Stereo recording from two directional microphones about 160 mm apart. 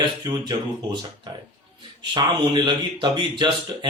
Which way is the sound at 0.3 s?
30° right (ahead or behind).